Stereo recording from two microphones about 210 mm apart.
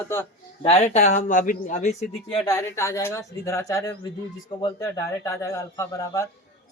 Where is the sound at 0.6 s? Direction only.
30° left (ahead or behind).